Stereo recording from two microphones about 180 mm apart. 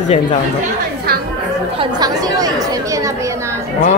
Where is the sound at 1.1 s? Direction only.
60° right (ahead or behind).